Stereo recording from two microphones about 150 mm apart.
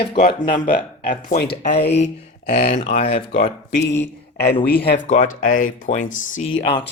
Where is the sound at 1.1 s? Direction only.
80° left.